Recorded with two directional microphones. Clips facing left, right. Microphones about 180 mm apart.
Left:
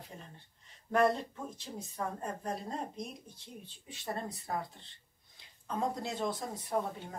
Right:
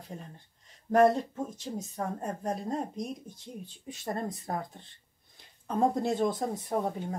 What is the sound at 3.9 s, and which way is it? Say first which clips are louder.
Speech: right 5 dB; 45° right (ahead or behind).